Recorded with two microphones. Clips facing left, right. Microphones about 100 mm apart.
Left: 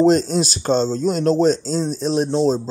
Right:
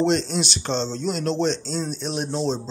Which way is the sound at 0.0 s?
40° left (ahead or behind).